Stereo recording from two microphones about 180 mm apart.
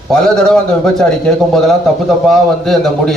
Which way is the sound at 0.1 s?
5° left (ahead or behind).